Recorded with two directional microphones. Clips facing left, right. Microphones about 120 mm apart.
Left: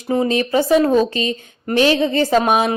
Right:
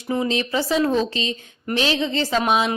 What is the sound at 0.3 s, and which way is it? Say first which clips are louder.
Speech: left 6 dB; 50° left (ahead or behind).